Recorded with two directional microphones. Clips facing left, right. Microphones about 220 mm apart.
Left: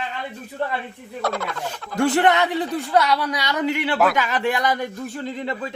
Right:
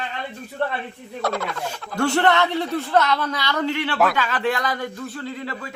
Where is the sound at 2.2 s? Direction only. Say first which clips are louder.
Left 1 dB; 15° left (ahead or behind).